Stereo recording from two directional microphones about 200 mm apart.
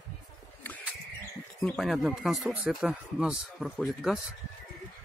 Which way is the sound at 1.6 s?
Centre (ahead or behind).